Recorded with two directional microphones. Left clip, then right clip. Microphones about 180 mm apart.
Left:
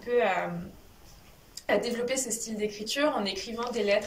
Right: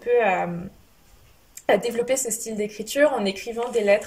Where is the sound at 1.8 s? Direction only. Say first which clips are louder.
Right 6 dB; 45° right (ahead or behind).